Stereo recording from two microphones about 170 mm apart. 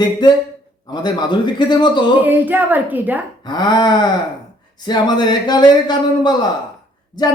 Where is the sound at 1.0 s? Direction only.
25° left (ahead or behind).